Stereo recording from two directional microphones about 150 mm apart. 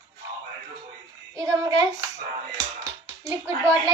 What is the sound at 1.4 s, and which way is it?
Speech, 20° right (ahead or behind).